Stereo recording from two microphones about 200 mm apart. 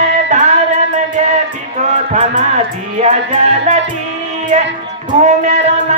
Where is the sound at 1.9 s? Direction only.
35° right (ahead or behind).